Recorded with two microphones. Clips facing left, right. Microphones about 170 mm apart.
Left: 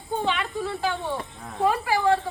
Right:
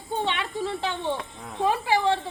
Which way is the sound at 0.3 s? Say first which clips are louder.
Left 1 dB; 25° right (ahead or behind).